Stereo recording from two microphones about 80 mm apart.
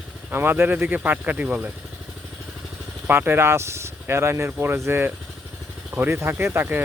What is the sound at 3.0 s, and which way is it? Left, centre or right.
Speech, right.